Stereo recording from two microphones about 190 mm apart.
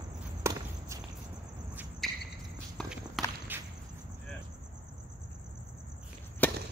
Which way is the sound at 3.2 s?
Centre (ahead or behind).